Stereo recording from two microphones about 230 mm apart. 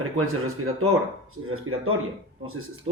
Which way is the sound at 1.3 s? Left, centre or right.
Right.